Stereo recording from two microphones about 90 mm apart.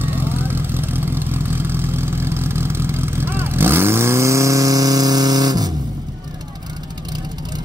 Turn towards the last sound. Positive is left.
turn(degrees=-45)  # may be behind; listen again after turning